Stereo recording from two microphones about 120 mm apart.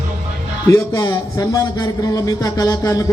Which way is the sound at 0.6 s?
25° left (ahead or behind).